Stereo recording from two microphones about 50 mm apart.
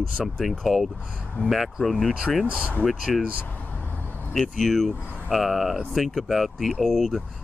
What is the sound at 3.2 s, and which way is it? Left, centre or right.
Speech, right.